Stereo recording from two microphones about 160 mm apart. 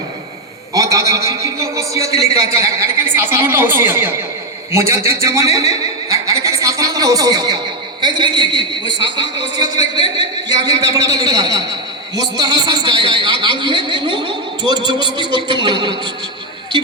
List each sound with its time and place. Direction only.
0.7 s a man's voice: 20° right (ahead or behind)
13.4 s a sound: 30° right (ahead or behind)
14.7 s a man's voice: 25° right (ahead or behind)